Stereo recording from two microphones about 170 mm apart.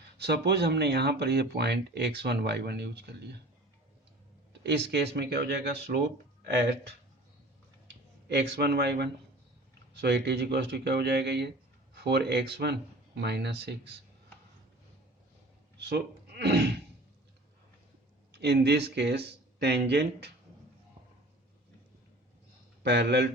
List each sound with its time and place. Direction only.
0.2 s speech: 75° right (ahead or behind)
4.6 s speech: 80° right
7.9 s speech: 75° right (ahead or behind)
15.8 s a sound: 70° right (ahead or behind)
18.3 s speech: 75° right (ahead or behind)
22.8 s speech: 75° right (ahead or behind)